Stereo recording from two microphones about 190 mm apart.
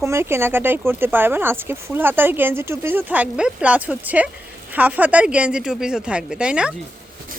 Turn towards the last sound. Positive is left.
turn(degrees=-5)  # may be behind; listen again after turning